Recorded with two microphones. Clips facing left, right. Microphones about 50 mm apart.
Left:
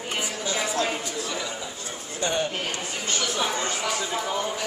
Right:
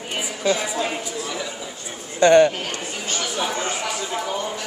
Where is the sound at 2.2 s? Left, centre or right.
Right.